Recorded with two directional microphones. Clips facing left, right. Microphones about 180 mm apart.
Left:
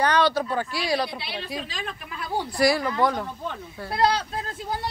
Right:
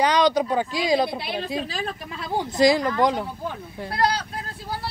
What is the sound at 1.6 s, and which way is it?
A woman's voice, 35° right (ahead or behind).